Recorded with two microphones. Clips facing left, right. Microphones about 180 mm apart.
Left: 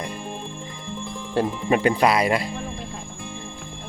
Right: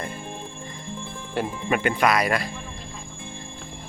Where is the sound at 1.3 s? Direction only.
30° left (ahead or behind).